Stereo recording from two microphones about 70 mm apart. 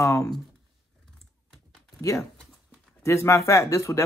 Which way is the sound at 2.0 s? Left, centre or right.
Left.